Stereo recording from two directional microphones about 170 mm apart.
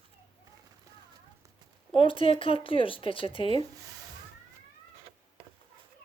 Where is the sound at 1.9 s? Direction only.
30° left (ahead or behind).